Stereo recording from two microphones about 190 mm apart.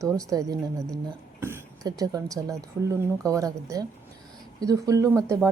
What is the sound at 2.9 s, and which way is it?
A woman's voice, 15° right (ahead or behind).